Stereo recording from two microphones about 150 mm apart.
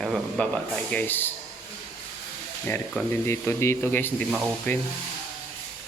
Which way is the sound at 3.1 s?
15° left (ahead or behind).